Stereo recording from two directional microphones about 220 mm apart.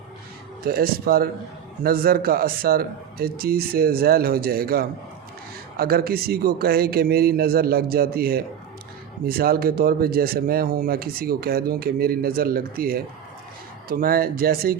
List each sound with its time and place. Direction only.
0.6 s speech: 45° right (ahead or behind)